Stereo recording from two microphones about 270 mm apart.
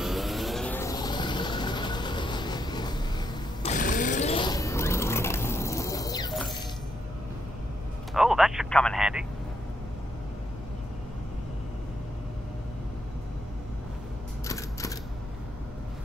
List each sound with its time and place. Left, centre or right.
0.0 s vehicle: centre
3.7 s a sound: left
8.1 s telephone: centre